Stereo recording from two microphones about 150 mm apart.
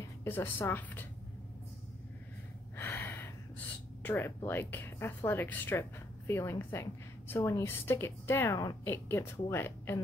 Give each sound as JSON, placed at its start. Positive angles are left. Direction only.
{"t": 0.2, "sound": "speech", "side_deg": 15}
{"t": 2.8, "sound": "gasp", "side_deg": 15}
{"t": 4.5, "sound": "speech", "side_deg": 15}